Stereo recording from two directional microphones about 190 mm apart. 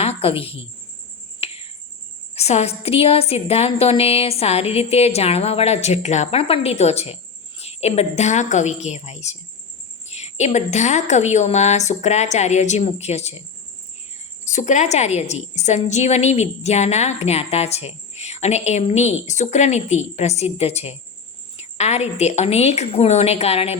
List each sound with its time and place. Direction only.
0.0 s a woman's voice: 30° left (ahead or behind)
1.4 s cricket: 30° left (ahead or behind)
2.3 s a woman's voice: 35° left (ahead or behind)
14.4 s a woman's voice: 40° left (ahead or behind)